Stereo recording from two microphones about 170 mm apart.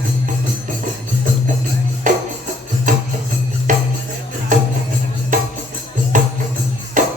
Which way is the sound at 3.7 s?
45° right (ahead or behind).